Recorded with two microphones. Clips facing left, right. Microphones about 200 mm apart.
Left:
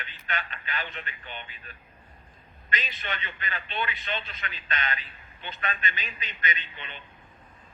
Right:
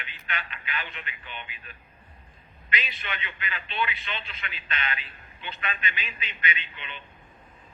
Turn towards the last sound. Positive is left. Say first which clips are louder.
# right 1 dB
turn(degrees=45)  # may be behind; listen again after turning